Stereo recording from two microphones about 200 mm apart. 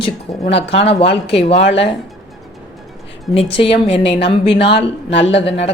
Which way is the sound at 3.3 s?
30° left (ahead or behind).